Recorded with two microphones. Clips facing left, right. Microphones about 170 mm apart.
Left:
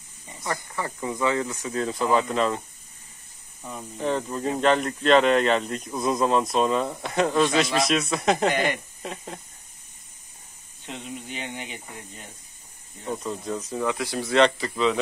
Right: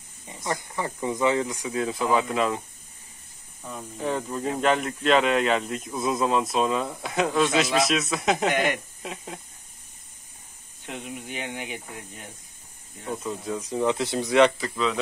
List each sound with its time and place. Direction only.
0.3 s speech: 15° right (ahead or behind)
4.2 s speech: centre (ahead or behind)
10.9 s speech: 10° right (ahead or behind)
13.0 s speech: centre (ahead or behind)
13.8 s speech: 25° right (ahead or behind)
14.6 s speech: centre (ahead or behind)